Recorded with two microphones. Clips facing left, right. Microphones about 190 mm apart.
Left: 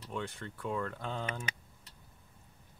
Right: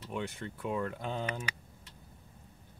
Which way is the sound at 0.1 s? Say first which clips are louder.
Right 2 dB; 20° right (ahead or behind).